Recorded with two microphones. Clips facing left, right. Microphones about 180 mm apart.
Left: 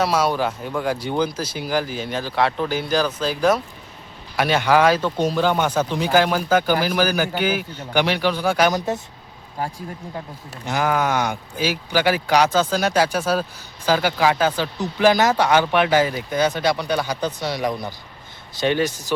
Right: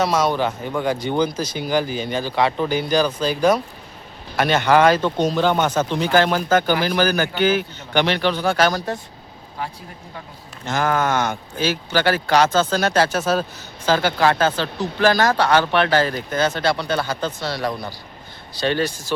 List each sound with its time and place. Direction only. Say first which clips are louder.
0.0 s speech: right 1 dB; 5° left (ahead or behind)
10.7 s speech: right 1 dB; 5° left (ahead or behind)